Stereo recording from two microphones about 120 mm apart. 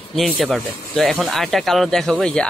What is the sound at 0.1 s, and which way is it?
Speech, centre (ahead or behind).